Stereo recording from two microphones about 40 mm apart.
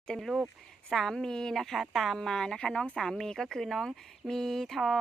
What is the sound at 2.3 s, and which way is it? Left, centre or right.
Speech, centre.